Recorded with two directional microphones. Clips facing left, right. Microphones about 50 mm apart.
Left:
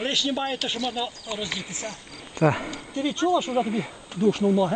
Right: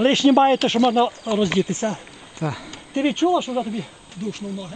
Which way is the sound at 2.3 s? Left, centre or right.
Left.